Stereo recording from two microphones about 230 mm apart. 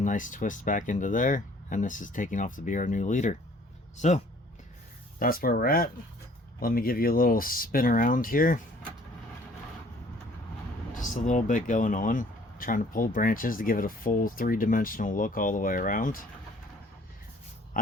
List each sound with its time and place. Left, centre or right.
0.0 s speech: left
5.2 s speech: left
10.9 s speech: left